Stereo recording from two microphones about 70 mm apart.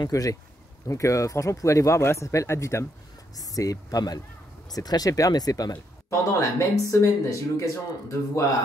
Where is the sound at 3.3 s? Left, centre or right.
Left.